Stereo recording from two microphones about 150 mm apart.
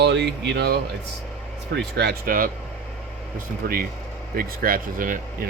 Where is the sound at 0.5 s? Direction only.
90° right.